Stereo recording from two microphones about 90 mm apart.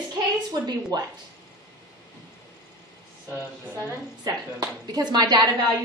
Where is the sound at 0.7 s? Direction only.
40° right (ahead or behind).